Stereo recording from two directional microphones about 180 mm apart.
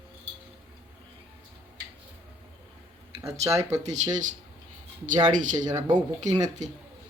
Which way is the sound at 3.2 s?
15° right (ahead or behind).